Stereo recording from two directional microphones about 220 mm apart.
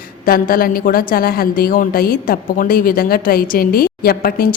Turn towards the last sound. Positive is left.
turn(degrees=40)  # may be behind; listen again after turning